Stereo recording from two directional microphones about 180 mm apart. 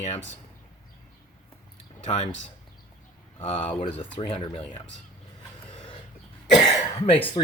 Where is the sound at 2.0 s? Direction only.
40° left (ahead or behind).